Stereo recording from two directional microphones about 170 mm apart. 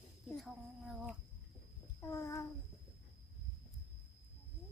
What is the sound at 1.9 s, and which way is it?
Child singing, 15° left (ahead or behind).